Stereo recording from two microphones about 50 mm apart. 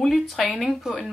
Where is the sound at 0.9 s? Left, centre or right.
Centre.